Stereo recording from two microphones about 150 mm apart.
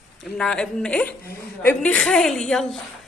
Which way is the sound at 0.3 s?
5° left (ahead or behind).